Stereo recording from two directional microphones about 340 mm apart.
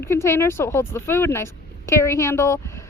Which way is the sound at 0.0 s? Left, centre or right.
Centre.